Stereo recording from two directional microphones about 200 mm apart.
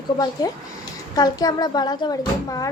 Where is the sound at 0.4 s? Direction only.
20° left (ahead or behind).